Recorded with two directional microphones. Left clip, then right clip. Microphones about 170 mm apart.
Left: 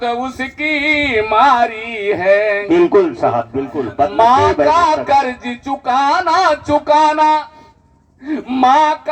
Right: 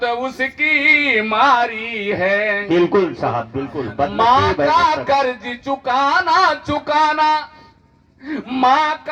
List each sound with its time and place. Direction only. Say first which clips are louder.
0.0 s speech: even; 35° left (ahead or behind)
8.5 s speech: left 4 dB; 35° left (ahead or behind)